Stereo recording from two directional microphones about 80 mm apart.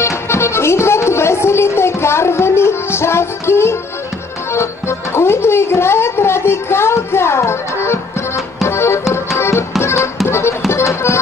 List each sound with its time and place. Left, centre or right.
0.0 s music: left